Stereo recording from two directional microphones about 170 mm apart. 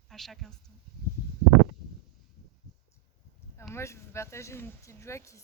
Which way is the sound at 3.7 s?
15° left (ahead or behind).